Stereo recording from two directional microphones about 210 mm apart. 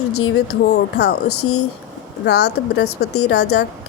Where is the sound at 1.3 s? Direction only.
90° left.